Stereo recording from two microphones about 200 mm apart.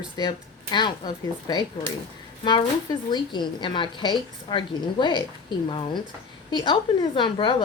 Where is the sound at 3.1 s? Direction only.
20° left (ahead or behind).